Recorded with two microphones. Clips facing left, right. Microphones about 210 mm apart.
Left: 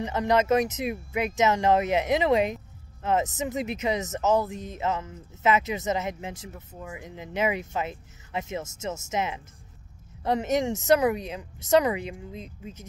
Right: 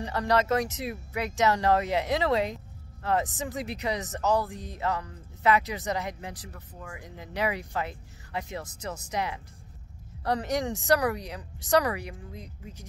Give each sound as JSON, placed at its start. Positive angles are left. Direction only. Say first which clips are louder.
{"t": 0.0, "sound": "speech", "louder": "left 2 dB", "side_deg": 20}